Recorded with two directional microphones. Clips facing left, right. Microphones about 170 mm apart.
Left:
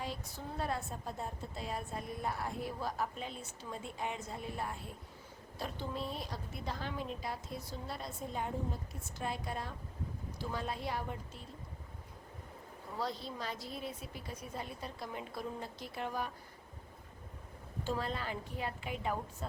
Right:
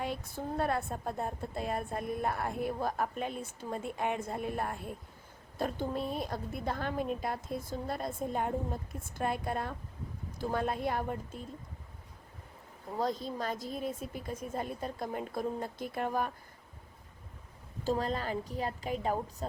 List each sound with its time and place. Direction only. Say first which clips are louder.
0.0 s a woman's voice: right 6 dB; 55° right (ahead or behind)
13.0 s a woman's voice: right 6 dB; 45° right (ahead or behind)
17.8 s a woman's voice: right 6 dB; 40° right (ahead or behind)